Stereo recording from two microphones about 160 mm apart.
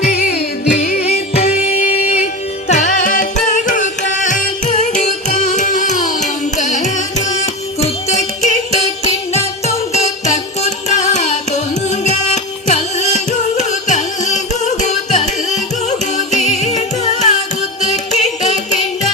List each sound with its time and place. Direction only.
0.0 s music: 75° left (ahead or behind)
0.8 s music: 45° left (ahead or behind)
17.9 s carnatic music: 45° left (ahead or behind)